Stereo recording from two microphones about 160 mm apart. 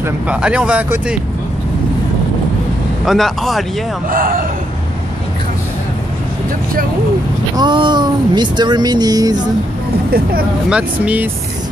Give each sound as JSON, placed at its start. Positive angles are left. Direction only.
{"t": 0.0, "sound": "speech", "side_deg": -5}
{"t": 3.1, "sound": "speech", "side_deg": 0}
{"t": 4.1, "sound": "speech", "side_deg": -60}
{"t": 7.5, "sound": "speech", "side_deg": -30}
{"t": 10.7, "sound": "speech", "side_deg": -10}